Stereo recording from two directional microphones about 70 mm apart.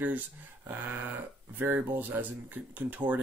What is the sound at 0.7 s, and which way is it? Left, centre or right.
Speech, right.